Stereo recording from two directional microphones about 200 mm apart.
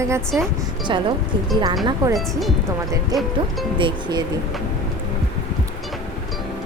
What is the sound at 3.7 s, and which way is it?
Speech, 25° right (ahead or behind).